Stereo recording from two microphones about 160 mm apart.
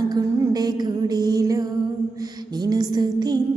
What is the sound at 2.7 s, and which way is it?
Female singing, 25° right (ahead or behind).